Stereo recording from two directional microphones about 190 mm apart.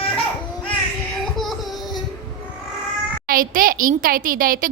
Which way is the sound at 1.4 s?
Centre (ahead or behind).